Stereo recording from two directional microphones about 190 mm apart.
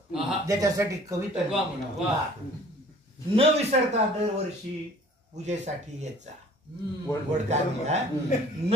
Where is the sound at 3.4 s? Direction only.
35° right (ahead or behind).